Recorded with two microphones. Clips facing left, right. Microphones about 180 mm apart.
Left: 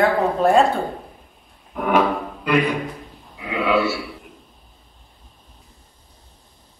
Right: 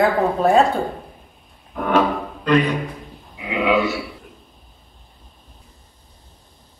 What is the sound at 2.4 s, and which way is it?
Speech, 10° left (ahead or behind).